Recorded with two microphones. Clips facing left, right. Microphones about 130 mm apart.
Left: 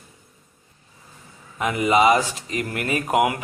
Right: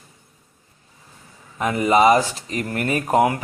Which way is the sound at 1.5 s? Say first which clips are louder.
Right 2 dB; 35° right (ahead or behind).